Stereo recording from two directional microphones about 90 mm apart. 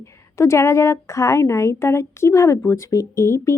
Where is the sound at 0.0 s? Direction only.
30° left (ahead or behind).